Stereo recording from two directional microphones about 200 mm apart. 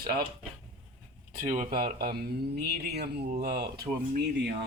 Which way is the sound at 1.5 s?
45° right (ahead or behind).